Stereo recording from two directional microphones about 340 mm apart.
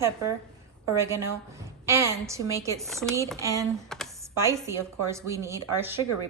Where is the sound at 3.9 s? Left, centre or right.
Centre.